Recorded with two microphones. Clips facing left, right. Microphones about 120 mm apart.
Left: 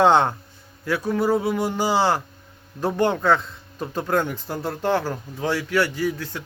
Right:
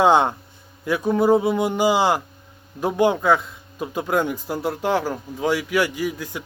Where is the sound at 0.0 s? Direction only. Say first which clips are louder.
Even; 15° right (ahead or behind).